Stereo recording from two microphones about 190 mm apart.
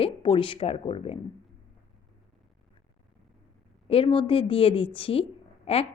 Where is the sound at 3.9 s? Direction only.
30° left (ahead or behind).